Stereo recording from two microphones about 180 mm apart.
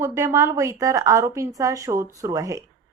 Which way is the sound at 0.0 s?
15° right (ahead or behind).